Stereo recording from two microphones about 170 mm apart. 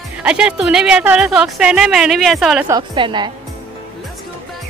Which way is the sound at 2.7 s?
30° right (ahead or behind).